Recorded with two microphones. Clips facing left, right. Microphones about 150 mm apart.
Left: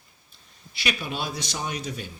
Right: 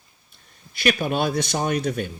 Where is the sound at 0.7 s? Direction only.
50° right (ahead or behind).